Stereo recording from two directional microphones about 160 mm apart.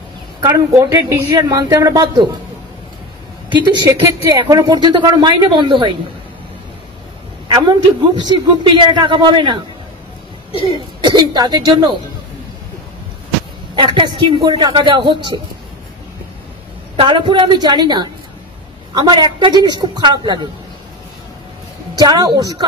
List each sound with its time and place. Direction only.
0.4 s speech: 20° right (ahead or behind)
3.4 s speech: 30° right (ahead or behind)
7.4 s speech: 30° right (ahead or behind)
10.6 s speech: 30° right (ahead or behind)
13.7 s speech: 30° right (ahead or behind)
16.9 s speech: 30° right (ahead or behind)
21.9 s speech: 25° right (ahead or behind)